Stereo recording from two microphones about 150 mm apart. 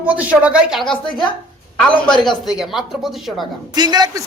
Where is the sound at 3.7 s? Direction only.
25° right (ahead or behind).